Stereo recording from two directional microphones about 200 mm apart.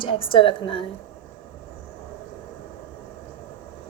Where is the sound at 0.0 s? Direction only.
25° left (ahead or behind).